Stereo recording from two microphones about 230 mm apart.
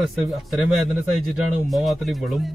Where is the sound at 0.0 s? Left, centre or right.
Centre.